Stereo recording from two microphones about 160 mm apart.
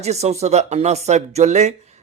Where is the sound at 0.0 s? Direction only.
45° right (ahead or behind).